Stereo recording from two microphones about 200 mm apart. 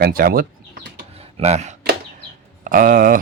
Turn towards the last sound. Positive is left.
turn(degrees=-45)  # may be behind; listen again after turning